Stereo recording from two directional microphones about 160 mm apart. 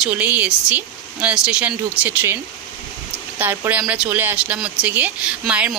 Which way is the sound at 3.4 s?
10° right (ahead or behind).